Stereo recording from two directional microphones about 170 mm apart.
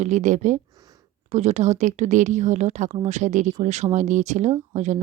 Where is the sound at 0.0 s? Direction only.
45° right (ahead or behind).